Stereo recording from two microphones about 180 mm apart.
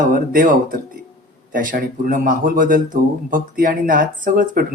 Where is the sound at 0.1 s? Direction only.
50° right (ahead or behind).